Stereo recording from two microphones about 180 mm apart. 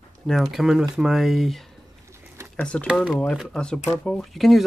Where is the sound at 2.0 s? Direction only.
15° right (ahead or behind).